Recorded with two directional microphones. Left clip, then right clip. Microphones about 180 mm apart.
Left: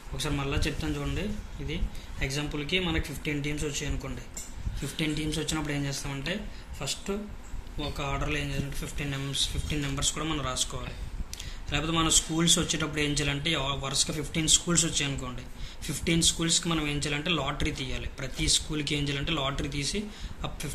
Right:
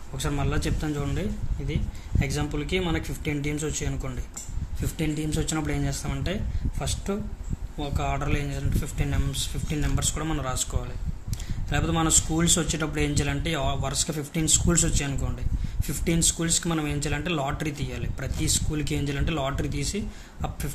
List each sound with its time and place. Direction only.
0.2 s speech: 55° right (ahead or behind)
4.7 s speech: 50° right (ahead or behind)
11.7 s speech: 55° right (ahead or behind)